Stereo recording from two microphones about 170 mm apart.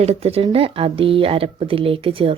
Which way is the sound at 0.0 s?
40° right (ahead or behind).